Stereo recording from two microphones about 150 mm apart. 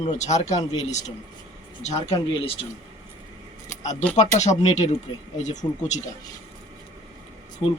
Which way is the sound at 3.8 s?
50° left (ahead or behind).